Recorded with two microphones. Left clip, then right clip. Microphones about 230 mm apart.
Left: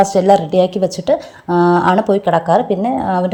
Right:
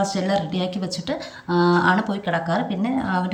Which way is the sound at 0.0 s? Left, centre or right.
Centre.